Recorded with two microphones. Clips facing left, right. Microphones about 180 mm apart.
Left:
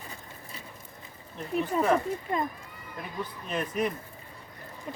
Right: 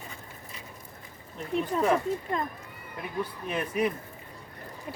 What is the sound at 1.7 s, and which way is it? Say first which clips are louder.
Speech: even; 5° left (ahead or behind).